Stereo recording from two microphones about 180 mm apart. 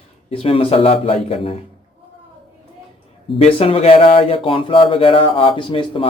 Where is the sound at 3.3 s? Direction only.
35° left (ahead or behind).